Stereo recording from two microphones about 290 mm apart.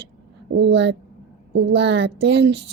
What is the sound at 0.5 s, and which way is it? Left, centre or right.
Speech, right.